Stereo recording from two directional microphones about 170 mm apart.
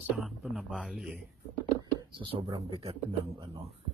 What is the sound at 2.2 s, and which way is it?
Speech, 30° right (ahead or behind).